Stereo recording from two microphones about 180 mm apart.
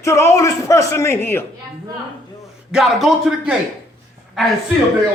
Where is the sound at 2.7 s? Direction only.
Centre (ahead or behind).